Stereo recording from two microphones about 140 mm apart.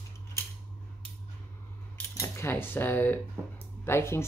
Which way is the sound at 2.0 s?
20° left (ahead or behind).